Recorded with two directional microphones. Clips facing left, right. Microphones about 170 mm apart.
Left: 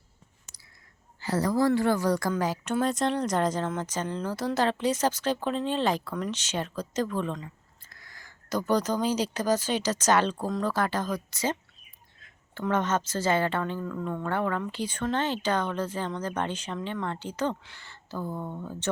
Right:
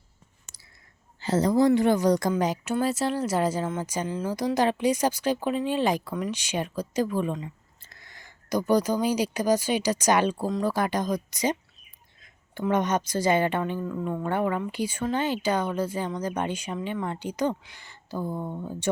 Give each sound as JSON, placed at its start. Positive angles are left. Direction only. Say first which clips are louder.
{"t": 1.2, "sound": "a woman's voice", "louder": "right 4 dB", "side_deg": -20}
{"t": 2.7, "sound": "speech", "louder": "left 1 dB", "side_deg": -5}
{"t": 7.8, "sound": "speech", "louder": "right 1 dB", "side_deg": -25}